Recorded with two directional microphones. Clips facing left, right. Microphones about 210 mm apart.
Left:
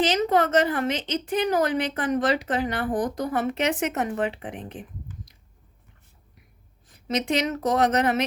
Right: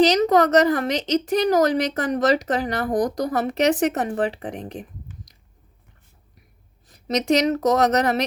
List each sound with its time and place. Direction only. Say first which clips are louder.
0.0 s a woman's voice: right 5 dB; 40° right (ahead or behind)
6.8 s speech: right 4 dB; 35° right (ahead or behind)